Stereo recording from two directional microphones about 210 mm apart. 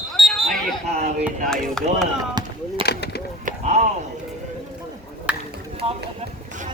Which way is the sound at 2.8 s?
50° left (ahead or behind).